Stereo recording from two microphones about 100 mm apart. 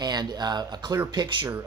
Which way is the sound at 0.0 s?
40° right (ahead or behind).